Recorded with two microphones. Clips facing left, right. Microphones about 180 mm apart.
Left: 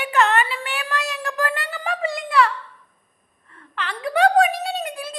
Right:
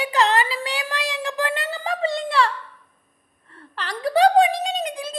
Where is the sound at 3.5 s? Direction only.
35° right (ahead or behind); by 5.1 s 20° right (ahead or behind).